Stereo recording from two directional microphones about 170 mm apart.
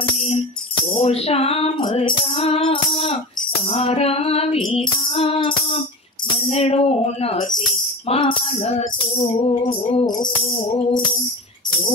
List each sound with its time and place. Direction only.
0.9 s music: 35° left (ahead or behind)